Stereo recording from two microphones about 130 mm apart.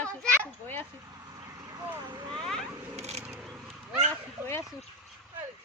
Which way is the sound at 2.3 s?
5° left (ahead or behind).